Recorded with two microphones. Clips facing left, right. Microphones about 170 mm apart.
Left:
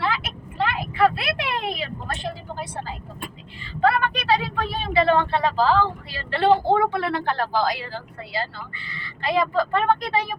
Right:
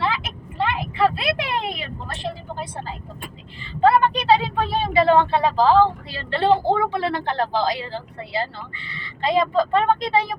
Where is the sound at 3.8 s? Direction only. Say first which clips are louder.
Right 4 dB; 25° right (ahead or behind).